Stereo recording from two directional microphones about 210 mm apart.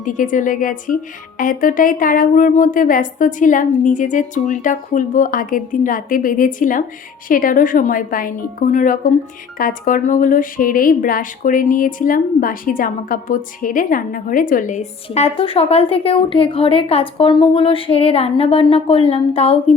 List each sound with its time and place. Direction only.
0.0 s speech: 40° left (ahead or behind)